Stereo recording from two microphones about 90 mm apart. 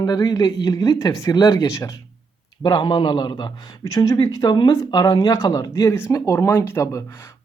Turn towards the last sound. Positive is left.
turn(degrees=30)  # may be behind; listen again after turning